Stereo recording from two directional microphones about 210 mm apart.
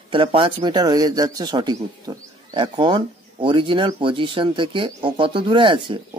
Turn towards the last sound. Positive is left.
turn(degrees=-25)  # may be behind; listen again after turning